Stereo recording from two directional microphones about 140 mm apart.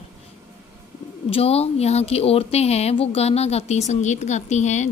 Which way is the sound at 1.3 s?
45° left (ahead or behind).